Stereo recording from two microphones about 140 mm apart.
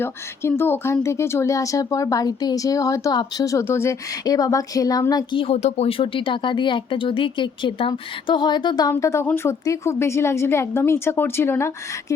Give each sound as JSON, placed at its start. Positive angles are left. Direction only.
{"t": 0.0, "sound": "speech", "side_deg": 15}
{"t": 5.4, "sound": "speech", "side_deg": 50}